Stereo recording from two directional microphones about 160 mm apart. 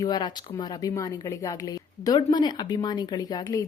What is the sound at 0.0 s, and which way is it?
A woman's voice, 25° left (ahead or behind).